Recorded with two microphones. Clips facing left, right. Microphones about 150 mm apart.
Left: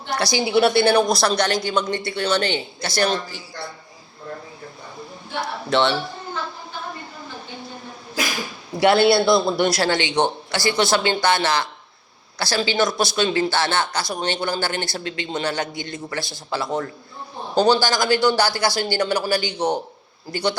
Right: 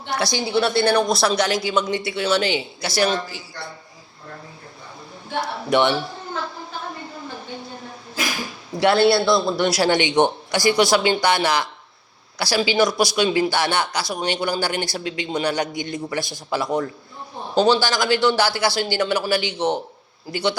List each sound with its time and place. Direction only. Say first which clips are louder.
0.3 s speech: left 5 dB; 10° left (ahead or behind)
5.7 s speech: right 1 dB; 15° right (ahead or behind)
8.7 s a sound: left 1 dB; centre (ahead or behind)
9.0 s a man's voice: left 1 dB; 15° left (ahead or behind)
9.6 s speech: right 2 dB; 10° right (ahead or behind)
17.6 s speech: even; 5° right (ahead or behind)
19.5 s a man's voice: even; 40° left (ahead or behind)
20.3 s speech: even; 5° right (ahead or behind)